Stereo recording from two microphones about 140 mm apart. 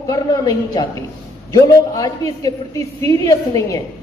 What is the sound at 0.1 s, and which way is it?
A man's voice, 25° left (ahead or behind).